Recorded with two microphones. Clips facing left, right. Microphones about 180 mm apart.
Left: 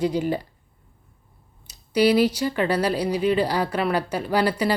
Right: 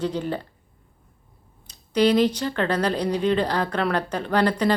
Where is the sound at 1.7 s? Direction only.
10° left (ahead or behind).